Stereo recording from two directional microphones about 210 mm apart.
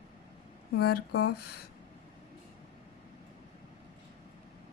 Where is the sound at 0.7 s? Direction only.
50° left (ahead or behind).